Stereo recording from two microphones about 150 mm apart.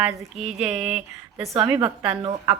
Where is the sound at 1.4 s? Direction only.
20° right (ahead or behind).